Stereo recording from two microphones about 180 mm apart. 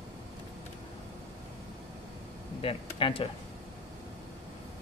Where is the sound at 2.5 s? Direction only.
30° left (ahead or behind).